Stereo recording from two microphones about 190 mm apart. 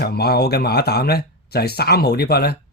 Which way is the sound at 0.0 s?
55° left (ahead or behind).